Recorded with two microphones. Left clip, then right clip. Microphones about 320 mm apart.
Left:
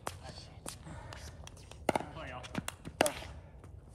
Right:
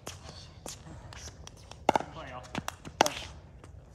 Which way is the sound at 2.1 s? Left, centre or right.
Centre.